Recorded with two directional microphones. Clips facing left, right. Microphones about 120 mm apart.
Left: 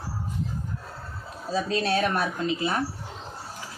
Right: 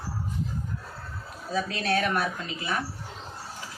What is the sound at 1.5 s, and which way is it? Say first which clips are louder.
Speech: left 2 dB; 30° left (ahead or behind).